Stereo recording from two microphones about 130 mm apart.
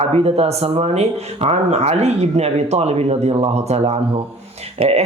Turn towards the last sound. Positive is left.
turn(degrees=-50)  # may be behind; listen again after turning